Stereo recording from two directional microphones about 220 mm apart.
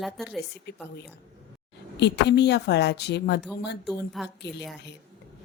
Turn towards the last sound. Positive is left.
turn(degrees=0)  # may be behind; listen again after turning